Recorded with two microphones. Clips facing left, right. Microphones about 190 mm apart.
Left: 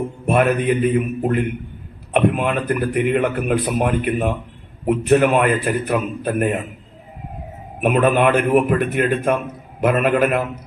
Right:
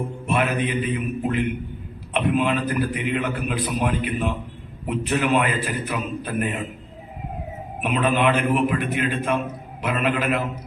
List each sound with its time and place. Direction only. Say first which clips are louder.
0.3 s a man's voice: left 7 dB; 50° left (ahead or behind)
7.8 s a man's voice: left 6 dB; 50° left (ahead or behind)